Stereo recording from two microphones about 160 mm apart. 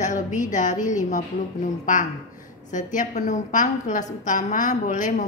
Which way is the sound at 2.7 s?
50° left (ahead or behind).